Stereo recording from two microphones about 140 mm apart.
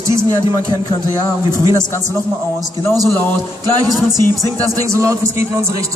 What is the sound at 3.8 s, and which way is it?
Speech, 25° right (ahead or behind).